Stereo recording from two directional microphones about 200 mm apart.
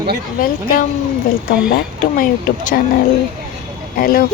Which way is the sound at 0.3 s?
45° left (ahead or behind).